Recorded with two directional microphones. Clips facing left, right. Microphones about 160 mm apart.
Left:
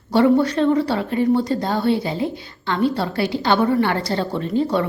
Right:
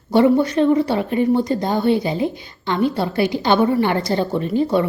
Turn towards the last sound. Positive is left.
turn(degrees=-10)  # may be behind; listen again after turning